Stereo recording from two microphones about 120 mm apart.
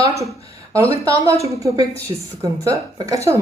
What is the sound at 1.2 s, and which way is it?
Speech, 25° right (ahead or behind).